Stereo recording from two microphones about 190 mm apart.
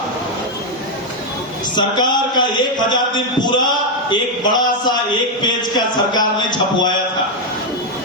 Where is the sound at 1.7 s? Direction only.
20° left (ahead or behind).